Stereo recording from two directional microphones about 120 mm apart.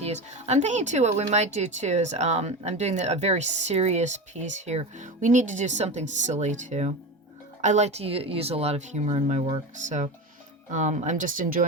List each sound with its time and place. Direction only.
0.0 s speech: 65° right (ahead or behind); by 11.4 s 90° right